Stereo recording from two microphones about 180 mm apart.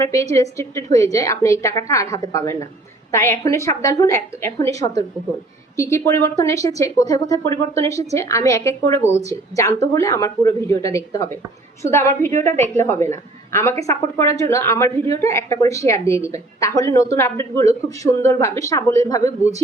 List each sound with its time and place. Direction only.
0.0 s speech: 15° left (ahead or behind)
5.7 s speech: 15° left (ahead or behind)
9.8 s speech: 15° left (ahead or behind)